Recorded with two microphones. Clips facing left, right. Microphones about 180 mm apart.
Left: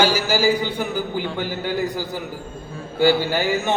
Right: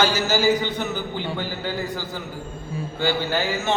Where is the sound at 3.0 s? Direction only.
10° left (ahead or behind).